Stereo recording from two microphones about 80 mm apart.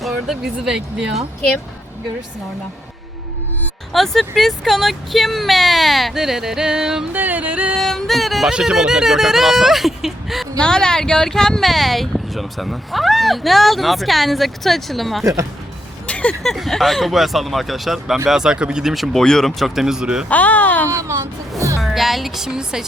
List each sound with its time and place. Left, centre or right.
0.0 s speech: centre
3.9 s speech: centre
7.1 s yodeling: right
7.8 s speech: centre
10.6 s speech: centre
15.2 s speech: right
16.0 s a sound: centre
16.4 s speech: centre
20.3 s speech: centre
20.9 s speech: right
21.8 s speech: centre